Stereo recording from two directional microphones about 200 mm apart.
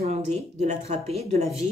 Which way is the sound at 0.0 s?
35° right (ahead or behind).